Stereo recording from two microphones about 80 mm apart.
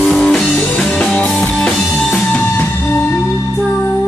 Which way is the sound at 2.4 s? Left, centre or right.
Left.